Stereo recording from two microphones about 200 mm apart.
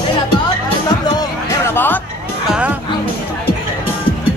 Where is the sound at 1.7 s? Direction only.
10° left (ahead or behind).